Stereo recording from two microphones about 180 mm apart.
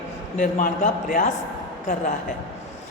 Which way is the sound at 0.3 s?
50° left (ahead or behind).